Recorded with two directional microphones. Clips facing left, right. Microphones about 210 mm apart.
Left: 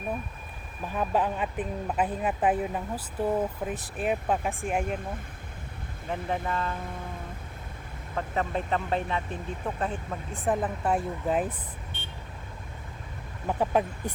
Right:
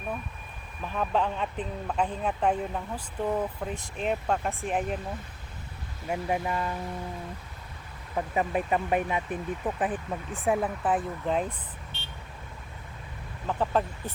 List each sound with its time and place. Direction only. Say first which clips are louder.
0.8 s speech: left 1 dB; 5° left (ahead or behind)
6.1 s speech: right 2 dB; 10° right (ahead or behind)
8.1 s speech: right 2 dB; 15° right (ahead or behind); by 11.5 s 5° left (ahead or behind)
11.9 s vehicle: left 2 dB; 50° left (ahead or behind)
13.5 s speech: left 1 dB; 15° left (ahead or behind)